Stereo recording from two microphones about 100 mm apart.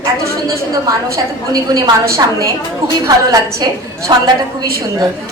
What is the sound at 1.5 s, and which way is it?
A woman's voice, 35° right (ahead or behind).